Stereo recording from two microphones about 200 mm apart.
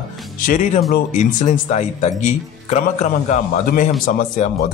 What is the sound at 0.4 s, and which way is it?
Speech, 40° left (ahead or behind).